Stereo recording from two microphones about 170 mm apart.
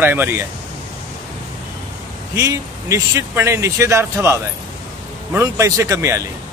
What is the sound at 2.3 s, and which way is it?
Speech, 20° right (ahead or behind).